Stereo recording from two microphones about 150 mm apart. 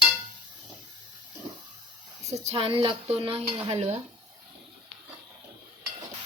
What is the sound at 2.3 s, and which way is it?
Speech, 45° right (ahead or behind).